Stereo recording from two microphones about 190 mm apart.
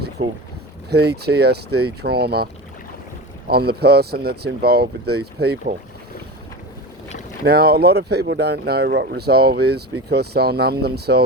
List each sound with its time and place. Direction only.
0.2 s speech: 35° right (ahead or behind)
0.9 s speech: 60° right (ahead or behind)
7.4 s speech: 55° right (ahead or behind)